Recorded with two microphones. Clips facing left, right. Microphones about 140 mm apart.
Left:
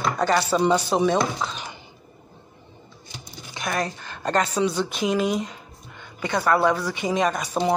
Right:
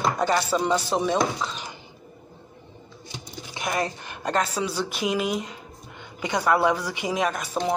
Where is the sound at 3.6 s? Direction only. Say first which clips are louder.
Even; 15° right (ahead or behind).